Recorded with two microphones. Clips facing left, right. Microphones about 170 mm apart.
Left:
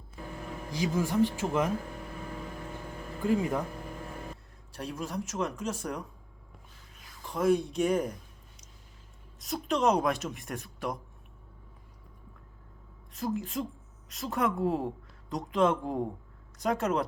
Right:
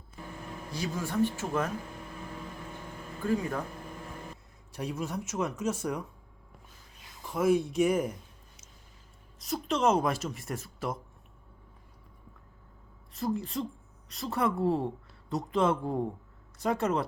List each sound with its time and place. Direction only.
0.7 s speech: 15° left (ahead or behind)
3.2 s speech: 15° left (ahead or behind)
4.8 s speech: 10° right (ahead or behind)
7.3 s speech: 5° right (ahead or behind)
9.4 s speech: centre (ahead or behind)
13.1 s speech: centre (ahead or behind)